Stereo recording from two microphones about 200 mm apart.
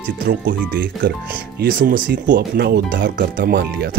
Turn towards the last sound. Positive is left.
turn(degrees=-50)  # may be behind; listen again after turning